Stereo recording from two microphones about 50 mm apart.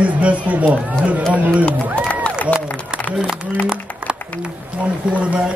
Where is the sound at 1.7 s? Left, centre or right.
Left.